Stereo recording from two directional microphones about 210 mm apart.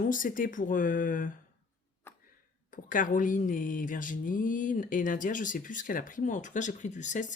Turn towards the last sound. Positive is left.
turn(degrees=35)  # may be behind; listen again after turning